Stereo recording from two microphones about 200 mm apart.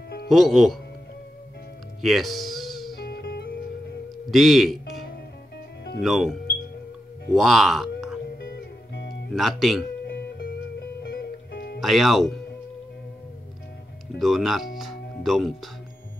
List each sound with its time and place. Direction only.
0.3 s speech: centre (ahead or behind)
2.0 s speech: centre (ahead or behind)
3.0 s music: 50° left (ahead or behind)
4.3 s speech: centre (ahead or behind)
6.0 s speech: centre (ahead or behind)
7.3 s speech: centre (ahead or behind)
8.4 s music: 55° left (ahead or behind)
9.3 s speech: centre (ahead or behind)
11.0 s music: 55° left (ahead or behind)
11.8 s speech: centre (ahead or behind)
14.1 s speech: centre (ahead or behind)